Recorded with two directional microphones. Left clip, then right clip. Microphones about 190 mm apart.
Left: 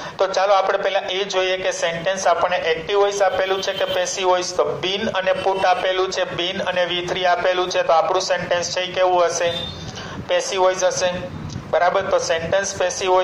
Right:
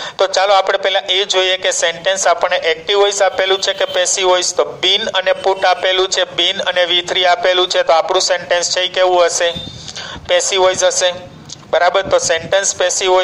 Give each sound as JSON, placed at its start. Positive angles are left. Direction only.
{"t": 0.2, "sound": "a man's voice", "side_deg": -55}